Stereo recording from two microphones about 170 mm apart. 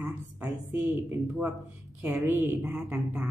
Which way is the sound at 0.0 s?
10° right (ahead or behind).